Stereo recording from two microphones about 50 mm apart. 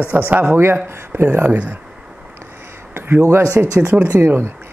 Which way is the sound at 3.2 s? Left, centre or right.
Right.